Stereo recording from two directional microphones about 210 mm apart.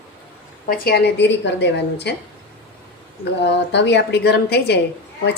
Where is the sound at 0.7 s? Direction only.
50° left (ahead or behind).